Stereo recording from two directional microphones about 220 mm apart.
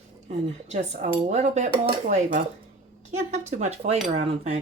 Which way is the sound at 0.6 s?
30° right (ahead or behind).